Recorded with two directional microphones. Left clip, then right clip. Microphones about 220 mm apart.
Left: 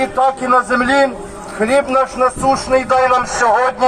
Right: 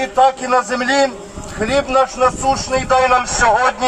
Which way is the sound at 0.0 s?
10° right (ahead or behind).